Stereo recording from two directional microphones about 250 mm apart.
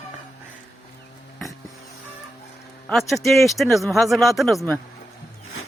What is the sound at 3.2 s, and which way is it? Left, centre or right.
Speech, centre.